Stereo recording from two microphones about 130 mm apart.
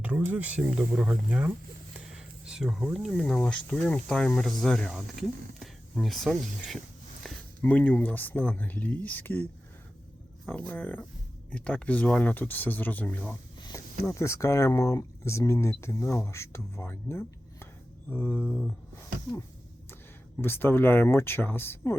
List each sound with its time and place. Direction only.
0.0 s speech: 10° right (ahead or behind)
7.2 s a sound: centre (ahead or behind)
7.6 s speech: 15° left (ahead or behind)
10.5 s speech: 10° left (ahead or behind)
20.4 s speech: 15° left (ahead or behind)